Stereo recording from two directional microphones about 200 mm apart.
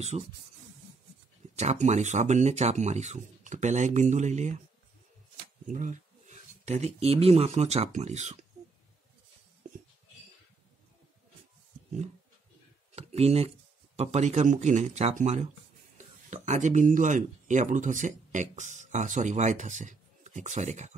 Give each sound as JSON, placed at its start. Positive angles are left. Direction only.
{"t": 0.1, "sound": "speech", "side_deg": -30}
{"t": 1.6, "sound": "speech", "side_deg": -35}
{"t": 5.7, "sound": "speech", "side_deg": -40}
{"t": 12.9, "sound": "a sound", "side_deg": -30}
{"t": 13.9, "sound": "speech", "side_deg": -35}